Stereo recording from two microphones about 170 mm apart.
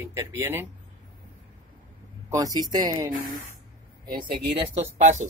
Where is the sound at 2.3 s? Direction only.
20° right (ahead or behind).